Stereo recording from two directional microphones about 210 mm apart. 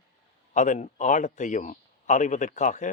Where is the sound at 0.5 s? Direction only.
35° left (ahead or behind).